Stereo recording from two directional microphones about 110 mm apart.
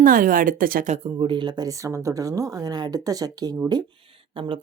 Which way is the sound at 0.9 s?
75° right (ahead or behind).